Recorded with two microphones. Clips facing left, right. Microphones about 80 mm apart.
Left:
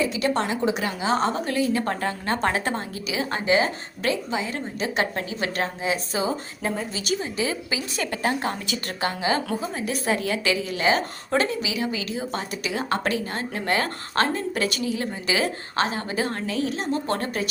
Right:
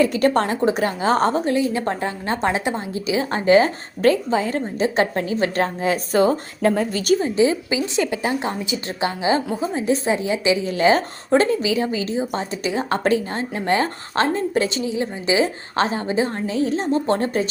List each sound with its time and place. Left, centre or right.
0.0 s a woman's voice: right
1.5 s a woman's voice: right
3.1 s a woman's voice: right
7.2 s a woman's voice: right
8.1 s a woman's voice: centre
10.7 s a woman's voice: right